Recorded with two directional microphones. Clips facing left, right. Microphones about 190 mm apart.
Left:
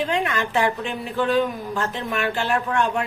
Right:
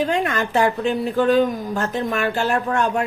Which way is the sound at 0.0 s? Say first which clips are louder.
Right 3 dB; 40° right (ahead or behind).